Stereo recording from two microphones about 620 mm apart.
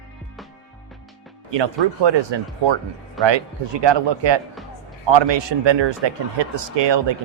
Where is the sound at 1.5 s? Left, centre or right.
Right.